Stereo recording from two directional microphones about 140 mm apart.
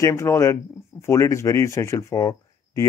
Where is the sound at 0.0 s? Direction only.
20° left (ahead or behind).